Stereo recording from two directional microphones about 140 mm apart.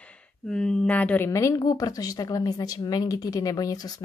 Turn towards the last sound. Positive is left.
turn(degrees=25)  # may be behind; listen again after turning